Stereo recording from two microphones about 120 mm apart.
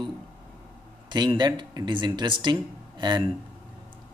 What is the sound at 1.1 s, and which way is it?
A man's voice, 40° right (ahead or behind).